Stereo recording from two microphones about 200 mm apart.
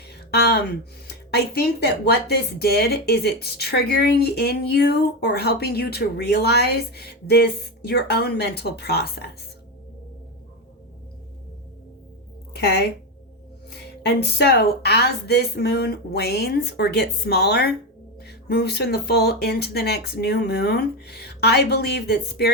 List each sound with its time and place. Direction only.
0.0 s a sound: 55° left (ahead or behind)
1.0 s speech: 55° left (ahead or behind)
12.5 s a woman's voice: 55° left (ahead or behind)
14.0 s speech: 55° left (ahead or behind)